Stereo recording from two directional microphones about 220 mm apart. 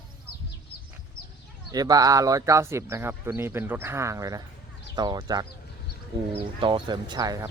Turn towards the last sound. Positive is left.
turn(degrees=-15)  # may be behind; listen again after turning